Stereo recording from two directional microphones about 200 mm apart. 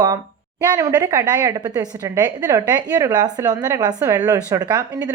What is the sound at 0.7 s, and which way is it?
A woman's voice, 15° right (ahead or behind).